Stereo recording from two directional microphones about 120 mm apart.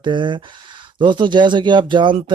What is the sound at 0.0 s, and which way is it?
Speech, 40° right (ahead or behind).